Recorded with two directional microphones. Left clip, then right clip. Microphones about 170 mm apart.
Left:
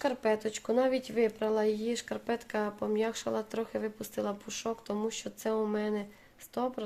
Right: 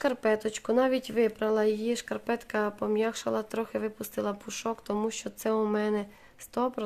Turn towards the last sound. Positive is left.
turn(degrees=-30)  # may be behind; listen again after turning